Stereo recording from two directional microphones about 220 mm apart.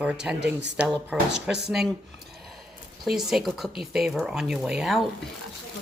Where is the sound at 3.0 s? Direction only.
Centre (ahead or behind).